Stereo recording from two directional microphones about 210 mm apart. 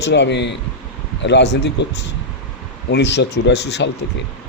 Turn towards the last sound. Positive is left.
turn(degrees=55)  # may be behind; listen again after turning